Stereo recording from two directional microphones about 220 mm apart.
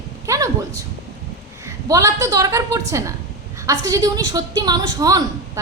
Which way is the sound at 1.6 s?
15° right (ahead or behind).